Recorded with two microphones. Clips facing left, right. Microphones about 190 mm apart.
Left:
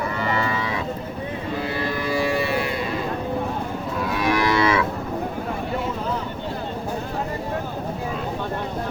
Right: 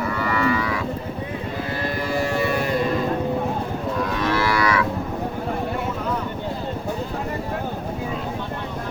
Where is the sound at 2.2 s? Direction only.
45° right (ahead or behind).